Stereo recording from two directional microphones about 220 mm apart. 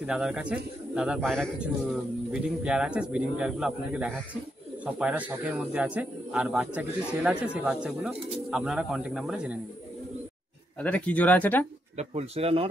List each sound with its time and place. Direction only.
0.0 s speech: 5° right (ahead or behind)
10.8 s speech: 5° left (ahead or behind)
12.0 s speech: 25° right (ahead or behind)